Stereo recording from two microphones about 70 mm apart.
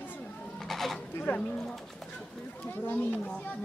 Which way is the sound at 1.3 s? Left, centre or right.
Left.